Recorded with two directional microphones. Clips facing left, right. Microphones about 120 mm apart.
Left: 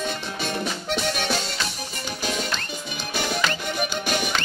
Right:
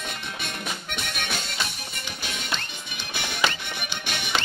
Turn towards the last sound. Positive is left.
turn(degrees=40)  # may be behind; listen again after turning